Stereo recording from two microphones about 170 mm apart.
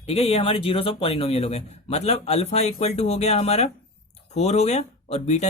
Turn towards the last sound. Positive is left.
turn(degrees=40)  # may be behind; listen again after turning